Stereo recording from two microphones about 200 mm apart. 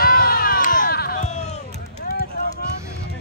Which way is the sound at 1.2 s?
35° left (ahead or behind).